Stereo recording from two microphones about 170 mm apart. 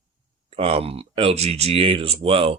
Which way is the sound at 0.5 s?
35° right (ahead or behind).